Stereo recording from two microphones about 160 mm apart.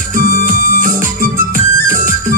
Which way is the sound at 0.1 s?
55° right (ahead or behind).